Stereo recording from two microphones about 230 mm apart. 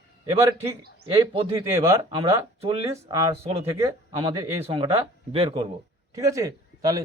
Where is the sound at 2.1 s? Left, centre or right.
Right.